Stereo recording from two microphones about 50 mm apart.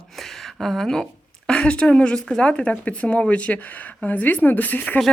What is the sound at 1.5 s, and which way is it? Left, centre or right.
Speech, left.